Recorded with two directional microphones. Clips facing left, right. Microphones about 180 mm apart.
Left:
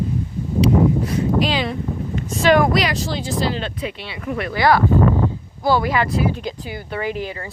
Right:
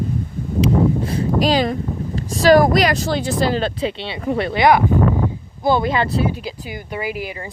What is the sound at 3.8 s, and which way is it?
Speech, 30° right (ahead or behind).